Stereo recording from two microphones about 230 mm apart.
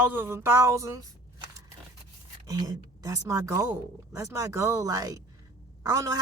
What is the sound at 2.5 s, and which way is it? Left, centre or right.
Speech, centre.